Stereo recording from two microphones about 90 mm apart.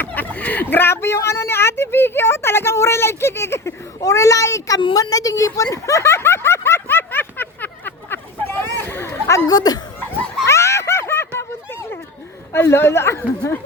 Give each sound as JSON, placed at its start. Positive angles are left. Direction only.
{"t": 0.0, "sound": "a woman's voice", "side_deg": 20}
{"t": 5.7, "sound": "snicker", "side_deg": 35}
{"t": 9.5, "sound": "speech", "side_deg": 45}
{"t": 10.4, "sound": "snicker", "side_deg": 30}
{"t": 12.5, "sound": "speech", "side_deg": 30}